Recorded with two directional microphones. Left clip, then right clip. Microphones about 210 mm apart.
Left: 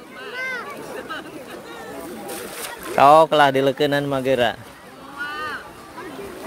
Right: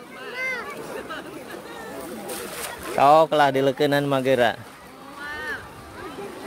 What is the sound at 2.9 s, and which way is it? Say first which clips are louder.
Speech: left 4 dB; 10° left (ahead or behind).